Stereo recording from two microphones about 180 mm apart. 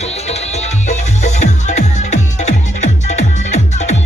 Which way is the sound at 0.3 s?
40° left (ahead or behind).